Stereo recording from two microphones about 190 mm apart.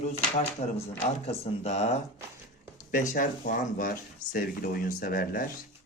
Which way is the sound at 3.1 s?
45° left (ahead or behind).